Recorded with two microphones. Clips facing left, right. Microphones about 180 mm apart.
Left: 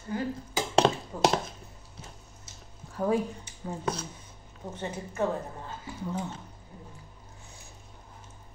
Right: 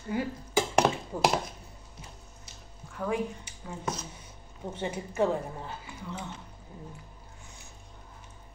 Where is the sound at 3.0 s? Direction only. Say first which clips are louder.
Left 5 dB; 40° left (ahead or behind).